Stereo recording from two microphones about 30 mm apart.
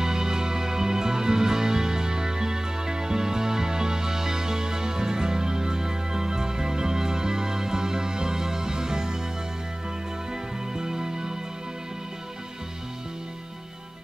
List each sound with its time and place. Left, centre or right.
0.0 s music: right
10.7 s music: right